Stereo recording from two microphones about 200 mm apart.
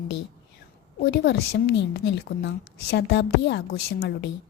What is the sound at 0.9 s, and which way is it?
A woman's voice, 50° left (ahead or behind).